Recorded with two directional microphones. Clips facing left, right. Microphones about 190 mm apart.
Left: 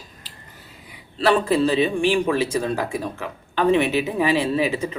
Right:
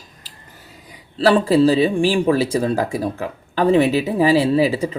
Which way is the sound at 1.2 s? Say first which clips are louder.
Right 4 dB; 30° right (ahead or behind).